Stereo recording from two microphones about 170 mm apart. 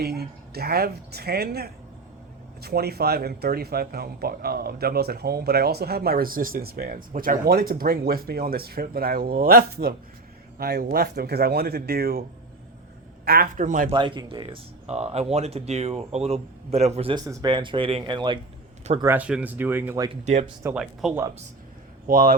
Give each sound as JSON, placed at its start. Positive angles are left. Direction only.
{"t": 0.0, "sound": "a woman's voice", "side_deg": -70}
{"t": 13.2, "sound": "a man's voice", "side_deg": -60}
{"t": 13.9, "sound": "speech", "side_deg": -25}
{"t": 19.0, "sound": "speech", "side_deg": -10}
{"t": 22.0, "sound": "speech", "side_deg": -55}